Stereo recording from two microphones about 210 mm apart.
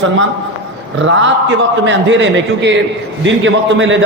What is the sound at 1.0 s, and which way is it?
A man's voice, 60° right (ahead or behind).